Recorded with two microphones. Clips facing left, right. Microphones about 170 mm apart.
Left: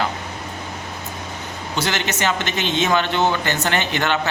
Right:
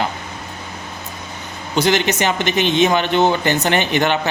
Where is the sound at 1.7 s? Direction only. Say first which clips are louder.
Right 7 dB; 15° right (ahead or behind).